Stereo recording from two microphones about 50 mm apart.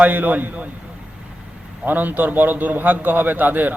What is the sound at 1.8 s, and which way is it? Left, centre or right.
A man's voice, right.